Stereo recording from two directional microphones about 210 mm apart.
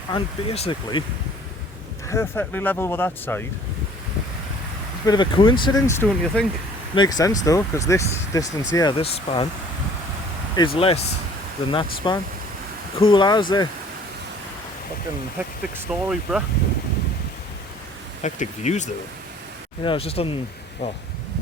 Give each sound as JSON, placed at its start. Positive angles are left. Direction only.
{"t": 0.1, "sound": "speech", "side_deg": 30}
{"t": 2.0, "sound": "speech", "side_deg": 10}
{"t": 5.0, "sound": "speech", "side_deg": 20}
{"t": 10.8, "sound": "speech", "side_deg": 25}
{"t": 12.0, "sound": "speech", "side_deg": 20}
{"t": 15.4, "sound": "speech", "side_deg": -5}
{"t": 18.2, "sound": "speech", "side_deg": 35}